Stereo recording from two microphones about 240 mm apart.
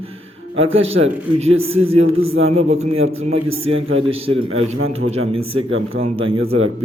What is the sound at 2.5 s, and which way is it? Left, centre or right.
Speech, right.